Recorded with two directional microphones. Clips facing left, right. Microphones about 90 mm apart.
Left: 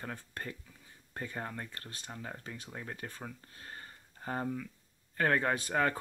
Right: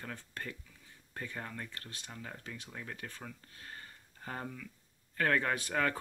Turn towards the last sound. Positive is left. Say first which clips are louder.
# left 2 dB
turn(degrees=25)  # may be behind; listen again after turning